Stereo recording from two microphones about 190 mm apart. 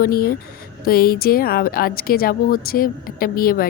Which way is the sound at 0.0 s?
50° left (ahead or behind).